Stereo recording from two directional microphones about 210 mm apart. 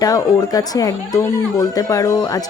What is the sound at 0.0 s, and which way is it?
Speech, 15° left (ahead or behind).